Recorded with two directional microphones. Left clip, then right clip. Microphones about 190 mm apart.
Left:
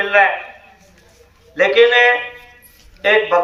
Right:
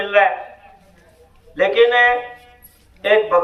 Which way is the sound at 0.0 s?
15° right (ahead or behind).